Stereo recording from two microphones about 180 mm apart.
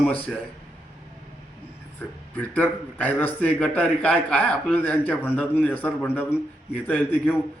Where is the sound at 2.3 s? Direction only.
10° left (ahead or behind).